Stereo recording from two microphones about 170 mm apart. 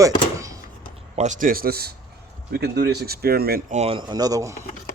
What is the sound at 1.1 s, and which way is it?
Speech, 45° right (ahead or behind).